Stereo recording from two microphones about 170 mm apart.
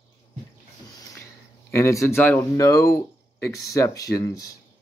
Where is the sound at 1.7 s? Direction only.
15° left (ahead or behind).